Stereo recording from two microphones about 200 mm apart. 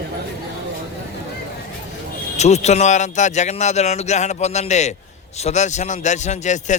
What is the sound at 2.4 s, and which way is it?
A man's voice, 35° left (ahead or behind).